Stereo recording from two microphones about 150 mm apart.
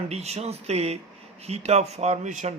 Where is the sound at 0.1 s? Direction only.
45° right (ahead or behind).